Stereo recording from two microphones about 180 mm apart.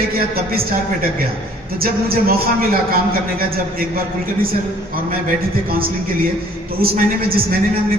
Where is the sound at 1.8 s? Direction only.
55° right (ahead or behind).